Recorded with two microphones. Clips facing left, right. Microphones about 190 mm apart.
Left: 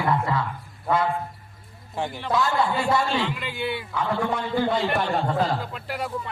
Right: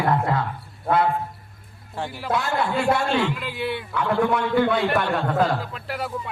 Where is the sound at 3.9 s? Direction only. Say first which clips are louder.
Right 6 dB; 60° right (ahead or behind).